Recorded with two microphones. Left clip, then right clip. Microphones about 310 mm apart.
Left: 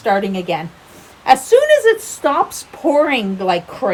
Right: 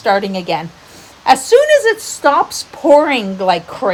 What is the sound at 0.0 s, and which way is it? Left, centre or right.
Speech, right.